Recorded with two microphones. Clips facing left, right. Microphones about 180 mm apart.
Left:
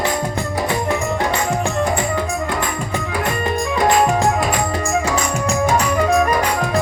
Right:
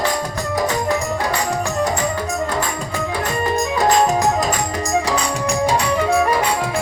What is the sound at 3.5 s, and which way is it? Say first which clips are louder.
Music: even; 40° right (ahead or behind).